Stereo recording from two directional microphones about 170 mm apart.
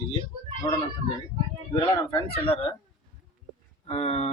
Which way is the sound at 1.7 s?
30° left (ahead or behind).